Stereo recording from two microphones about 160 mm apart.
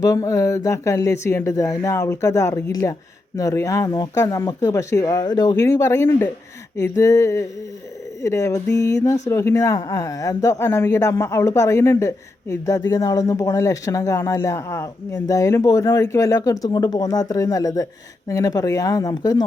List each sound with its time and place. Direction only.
0.0 s a man's voice: 20° left (ahead or behind)
6.8 s a sound: 20° left (ahead or behind)
8.2 s a man's voice: 20° left (ahead or behind)